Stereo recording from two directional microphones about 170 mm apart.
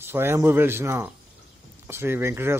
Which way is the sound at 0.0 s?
15° right (ahead or behind).